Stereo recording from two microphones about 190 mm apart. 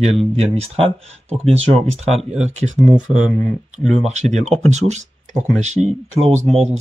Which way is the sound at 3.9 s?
35° right (ahead or behind).